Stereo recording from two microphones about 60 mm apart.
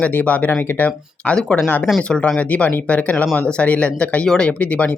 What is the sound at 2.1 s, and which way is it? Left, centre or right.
Speech, centre.